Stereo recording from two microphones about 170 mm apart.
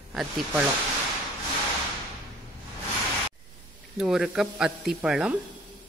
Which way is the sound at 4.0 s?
5° right (ahead or behind).